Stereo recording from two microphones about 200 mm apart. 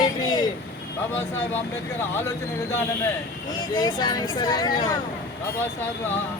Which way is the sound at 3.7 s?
20° left (ahead or behind).